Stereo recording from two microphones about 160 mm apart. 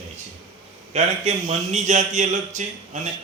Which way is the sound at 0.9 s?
45° right (ahead or behind).